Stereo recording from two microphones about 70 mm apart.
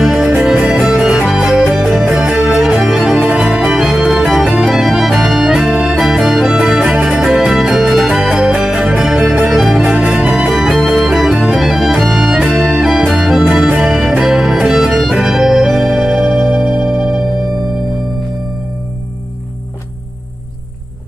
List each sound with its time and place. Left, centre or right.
0.0 s music: centre
14.2 s music: centre